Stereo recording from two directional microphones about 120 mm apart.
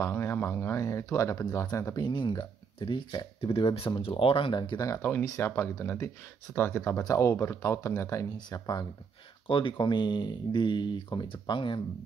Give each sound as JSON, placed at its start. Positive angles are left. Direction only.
{"t": 0.0, "sound": "speech", "side_deg": 20}
{"t": 3.3, "sound": "speech", "side_deg": 50}
{"t": 9.5, "sound": "speech", "side_deg": 45}